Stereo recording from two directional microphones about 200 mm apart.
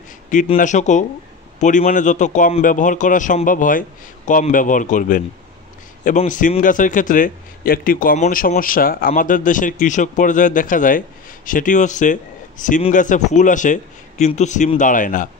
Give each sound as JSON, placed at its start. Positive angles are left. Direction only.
{"t": 0.3, "sound": "speech", "side_deg": 40}